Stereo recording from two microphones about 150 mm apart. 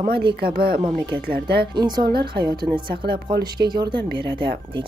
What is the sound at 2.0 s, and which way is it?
Speech, 90° right.